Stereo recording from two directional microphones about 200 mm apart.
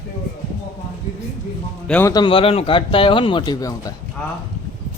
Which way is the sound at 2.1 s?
25° left (ahead or behind).